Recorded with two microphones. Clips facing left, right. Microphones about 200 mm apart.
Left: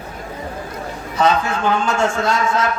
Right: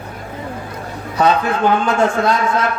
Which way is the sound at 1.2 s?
55° right (ahead or behind).